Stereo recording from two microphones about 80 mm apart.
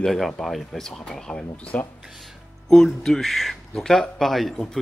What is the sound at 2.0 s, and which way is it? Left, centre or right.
Speech, centre.